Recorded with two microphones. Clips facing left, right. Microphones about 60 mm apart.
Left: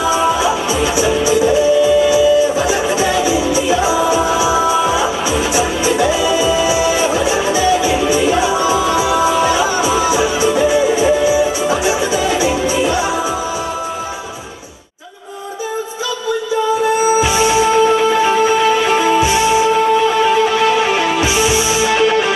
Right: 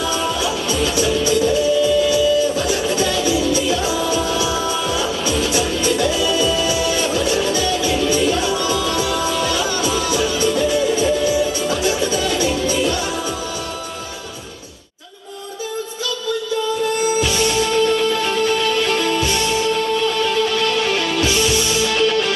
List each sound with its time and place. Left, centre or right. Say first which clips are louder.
0.0 s music: left 7 dB; centre
16.8 s music: left 5 dB; centre